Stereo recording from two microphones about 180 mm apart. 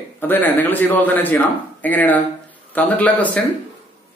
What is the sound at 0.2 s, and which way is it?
A man's voice, 10° left (ahead or behind).